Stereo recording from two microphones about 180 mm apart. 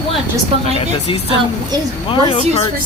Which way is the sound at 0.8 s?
30° left (ahead or behind).